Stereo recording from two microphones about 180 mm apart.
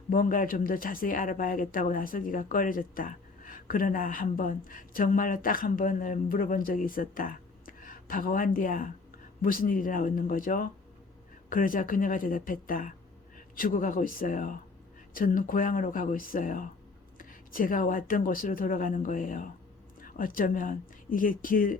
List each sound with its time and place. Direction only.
0.1 s speech: 50° left (ahead or behind)